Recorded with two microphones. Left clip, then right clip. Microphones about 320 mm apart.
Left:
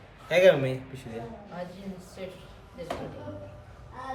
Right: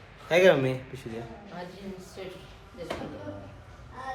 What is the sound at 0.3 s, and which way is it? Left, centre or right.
Speech, centre.